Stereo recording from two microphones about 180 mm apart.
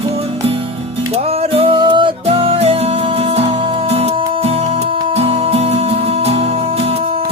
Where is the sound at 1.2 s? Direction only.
35° right (ahead or behind).